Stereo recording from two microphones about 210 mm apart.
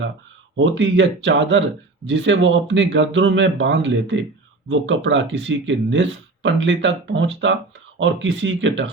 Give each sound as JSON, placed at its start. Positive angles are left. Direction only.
{"t": 0.5, "sound": "speech", "side_deg": -65}